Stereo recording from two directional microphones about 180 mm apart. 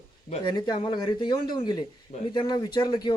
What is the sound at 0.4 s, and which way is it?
Speech, 25° left (ahead or behind).